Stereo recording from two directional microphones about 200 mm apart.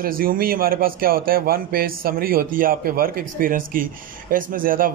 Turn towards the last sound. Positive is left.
turn(degrees=-45)  # may be behind; listen again after turning